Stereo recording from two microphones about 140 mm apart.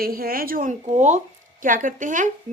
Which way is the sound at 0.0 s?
90° right.